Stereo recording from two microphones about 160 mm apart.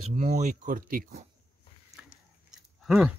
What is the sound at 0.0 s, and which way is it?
Speech, 40° right (ahead or behind).